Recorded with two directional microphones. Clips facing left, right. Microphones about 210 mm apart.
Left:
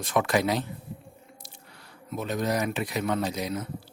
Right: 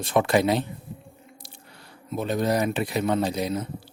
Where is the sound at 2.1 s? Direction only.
30° right (ahead or behind).